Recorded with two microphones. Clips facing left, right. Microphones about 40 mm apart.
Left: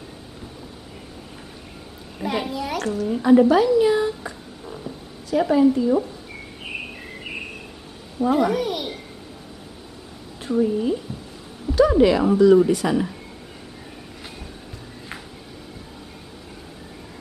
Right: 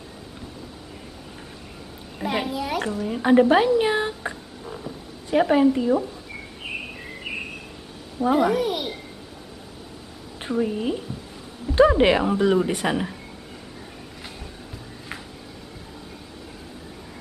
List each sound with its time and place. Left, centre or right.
2.1 s a child's voice: centre
3.2 s a woman's voice: right
4.6 s a sound: centre
5.3 s a woman's voice: right
8.2 s a child's voice: centre
10.6 s speech: right
11.7 s a sound: right
12.0 s a woman's voice: right